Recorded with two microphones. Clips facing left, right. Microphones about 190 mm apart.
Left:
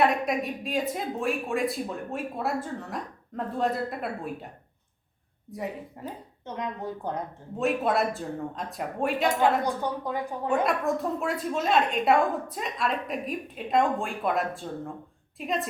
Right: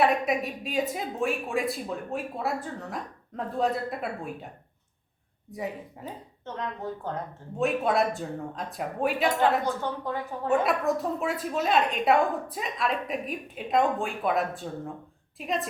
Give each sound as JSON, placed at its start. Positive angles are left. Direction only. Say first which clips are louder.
{"t": 0.0, "sound": "a woman's voice", "louder": "even", "side_deg": 0}
{"t": 5.5, "sound": "a woman's voice", "louder": "even", "side_deg": 0}
{"t": 6.4, "sound": "speech", "louder": "left 1 dB", "side_deg": 15}
{"t": 7.6, "sound": "a woman's voice", "louder": "even", "side_deg": 0}
{"t": 9.6, "sound": "speech", "louder": "left 1 dB", "side_deg": 15}
{"t": 10.6, "sound": "a woman's voice", "louder": "even", "side_deg": 0}